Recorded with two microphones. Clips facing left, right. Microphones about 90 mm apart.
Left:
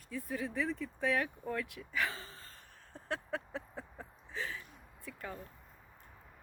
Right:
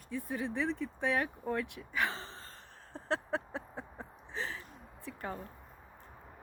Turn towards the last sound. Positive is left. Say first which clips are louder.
# right 4 dB
turn(degrees=-35)  # may be behind; listen again after turning